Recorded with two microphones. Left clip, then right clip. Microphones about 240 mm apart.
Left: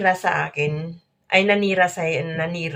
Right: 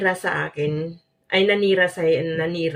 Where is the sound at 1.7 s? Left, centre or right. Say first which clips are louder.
Right 1 dB; left.